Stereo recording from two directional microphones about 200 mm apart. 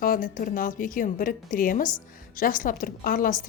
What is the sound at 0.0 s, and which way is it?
Speech, 45° left (ahead or behind).